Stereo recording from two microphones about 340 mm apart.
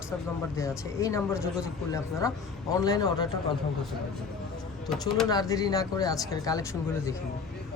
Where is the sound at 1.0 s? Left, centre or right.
Centre.